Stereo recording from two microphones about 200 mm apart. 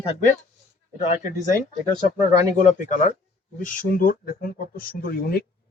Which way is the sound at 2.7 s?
40° left (ahead or behind).